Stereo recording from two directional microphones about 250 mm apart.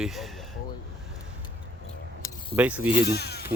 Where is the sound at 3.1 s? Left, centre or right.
Left.